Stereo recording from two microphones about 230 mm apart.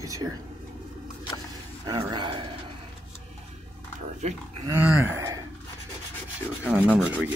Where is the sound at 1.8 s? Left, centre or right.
Centre.